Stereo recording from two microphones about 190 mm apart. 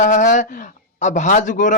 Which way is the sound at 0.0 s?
40° left (ahead or behind).